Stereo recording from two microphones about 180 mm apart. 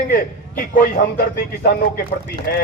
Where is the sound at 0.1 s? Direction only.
50° left (ahead or behind).